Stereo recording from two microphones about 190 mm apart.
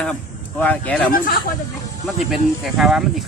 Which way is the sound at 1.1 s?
50° left (ahead or behind).